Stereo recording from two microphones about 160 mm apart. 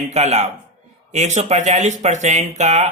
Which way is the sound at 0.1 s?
45° right (ahead or behind).